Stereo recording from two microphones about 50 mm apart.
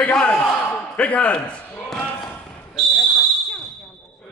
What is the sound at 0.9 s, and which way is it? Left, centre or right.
Speech, left.